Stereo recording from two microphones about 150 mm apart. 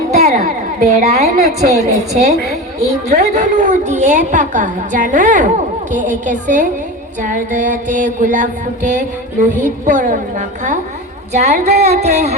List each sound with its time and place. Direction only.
0.1 s a woman's voice: 50° right (ahead or behind)
11.3 s music: 50° right (ahead or behind)